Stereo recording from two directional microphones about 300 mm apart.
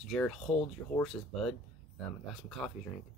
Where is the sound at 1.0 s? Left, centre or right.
Centre.